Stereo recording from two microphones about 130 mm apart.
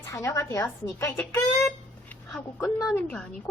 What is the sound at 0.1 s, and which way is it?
Speech, 25° left (ahead or behind).